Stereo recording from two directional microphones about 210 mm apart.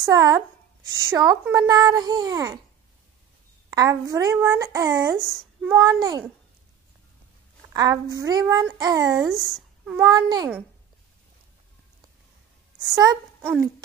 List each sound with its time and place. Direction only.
0.0 s a woman's voice: 15° right (ahead or behind)
3.7 s a woman's voice: 15° right (ahead or behind)
7.7 s a woman's voice: 15° right (ahead or behind)
12.8 s a woman's voice: 15° right (ahead or behind)